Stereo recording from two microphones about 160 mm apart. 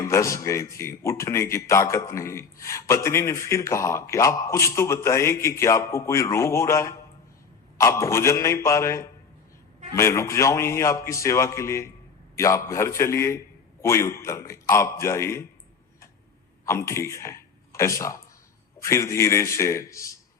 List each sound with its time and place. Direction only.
0.0 s a man's voice: 15° left (ahead or behind)
16.6 s a man's voice: 15° left (ahead or behind)